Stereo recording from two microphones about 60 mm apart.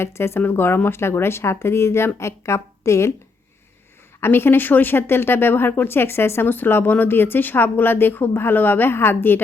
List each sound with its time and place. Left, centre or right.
0.0 s speech: left
4.2 s speech: left